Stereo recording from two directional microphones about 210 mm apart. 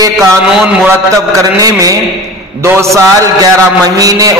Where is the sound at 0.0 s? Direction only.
15° right (ahead or behind).